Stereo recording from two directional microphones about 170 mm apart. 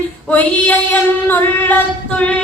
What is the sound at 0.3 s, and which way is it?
Female singing, 10° left (ahead or behind).